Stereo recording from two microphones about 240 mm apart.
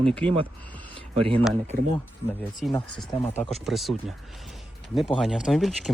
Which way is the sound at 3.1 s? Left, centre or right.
Left.